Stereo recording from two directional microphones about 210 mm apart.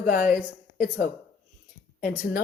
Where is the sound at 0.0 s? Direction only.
40° left (ahead or behind).